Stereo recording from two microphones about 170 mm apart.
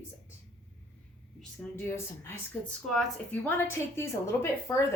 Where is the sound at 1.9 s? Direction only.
15° left (ahead or behind).